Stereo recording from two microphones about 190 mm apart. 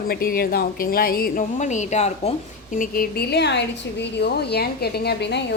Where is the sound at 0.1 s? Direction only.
50° left (ahead or behind); by 2.3 s 35° left (ahead or behind).